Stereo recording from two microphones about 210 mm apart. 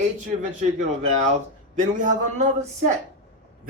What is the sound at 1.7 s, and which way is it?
A man's voice, 35° right (ahead or behind).